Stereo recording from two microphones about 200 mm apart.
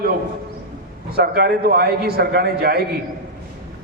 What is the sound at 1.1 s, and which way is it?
A man's voice, 50° right (ahead or behind).